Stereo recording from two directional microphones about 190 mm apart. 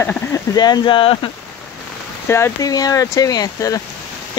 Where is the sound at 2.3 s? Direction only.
15° left (ahead or behind).